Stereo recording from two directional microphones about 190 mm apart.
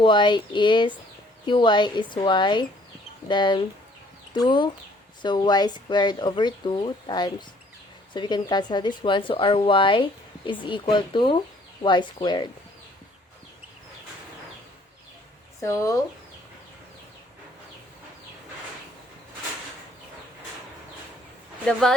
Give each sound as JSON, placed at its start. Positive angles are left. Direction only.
{"t": 0.0, "sound": "speech", "side_deg": 25}
{"t": 15.6, "sound": "speech", "side_deg": 15}
{"t": 21.7, "sound": "speech", "side_deg": 5}